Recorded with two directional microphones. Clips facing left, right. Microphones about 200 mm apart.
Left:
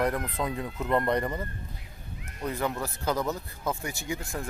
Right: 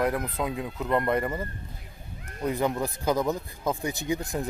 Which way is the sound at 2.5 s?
15° right (ahead or behind).